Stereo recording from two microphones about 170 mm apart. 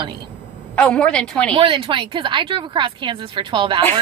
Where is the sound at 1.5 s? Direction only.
30° right (ahead or behind).